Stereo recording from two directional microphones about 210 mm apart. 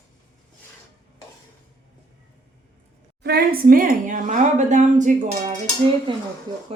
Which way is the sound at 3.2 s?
45° right (ahead or behind).